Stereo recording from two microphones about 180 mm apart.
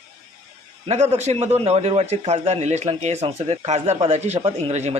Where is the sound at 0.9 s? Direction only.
40° right (ahead or behind).